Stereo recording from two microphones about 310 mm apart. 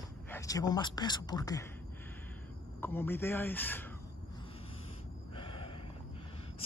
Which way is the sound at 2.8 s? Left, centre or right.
Centre.